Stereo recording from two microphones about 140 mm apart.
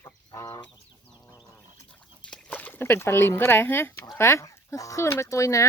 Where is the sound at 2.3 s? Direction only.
10° left (ahead or behind).